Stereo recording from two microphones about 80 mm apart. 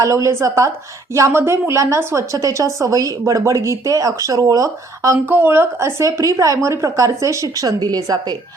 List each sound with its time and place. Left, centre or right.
0.0 s a woman's voice: right
5.2 s a woman's voice: right